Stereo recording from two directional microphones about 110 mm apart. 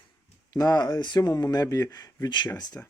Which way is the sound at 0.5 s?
35° left (ahead or behind).